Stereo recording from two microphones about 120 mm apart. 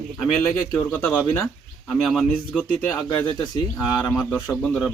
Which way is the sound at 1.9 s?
Centre (ahead or behind).